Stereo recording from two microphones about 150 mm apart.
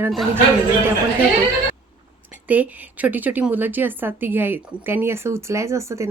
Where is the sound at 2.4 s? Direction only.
10° right (ahead or behind).